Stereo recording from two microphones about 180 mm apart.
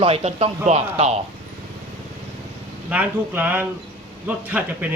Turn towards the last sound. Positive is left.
turn(degrees=-10)  # may be behind; listen again after turning